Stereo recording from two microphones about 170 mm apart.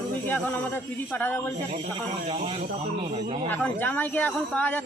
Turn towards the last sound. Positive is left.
turn(degrees=10)  # may be behind; listen again after turning